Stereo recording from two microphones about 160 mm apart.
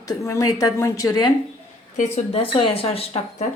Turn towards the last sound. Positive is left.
turn(degrees=35)  # may be behind; listen again after turning